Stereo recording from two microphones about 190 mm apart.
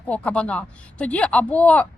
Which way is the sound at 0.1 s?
5° left (ahead or behind).